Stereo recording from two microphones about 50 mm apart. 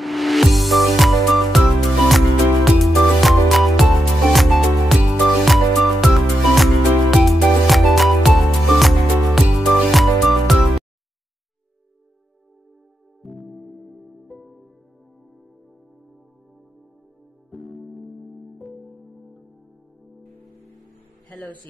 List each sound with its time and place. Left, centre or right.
0.0 s music: centre
13.2 s music: centre
17.5 s music: centre
21.3 s a sound: left